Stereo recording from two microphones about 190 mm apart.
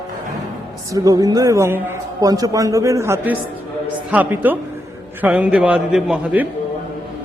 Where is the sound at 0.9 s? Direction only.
20° right (ahead or behind).